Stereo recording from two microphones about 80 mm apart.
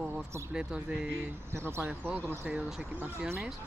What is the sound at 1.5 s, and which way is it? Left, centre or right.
Speech, right.